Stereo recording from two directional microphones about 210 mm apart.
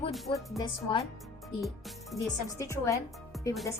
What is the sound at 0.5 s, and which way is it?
Speech, 20° left (ahead or behind).